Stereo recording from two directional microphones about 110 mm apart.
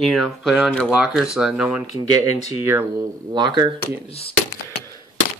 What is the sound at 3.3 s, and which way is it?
Speech, 45° right (ahead or behind).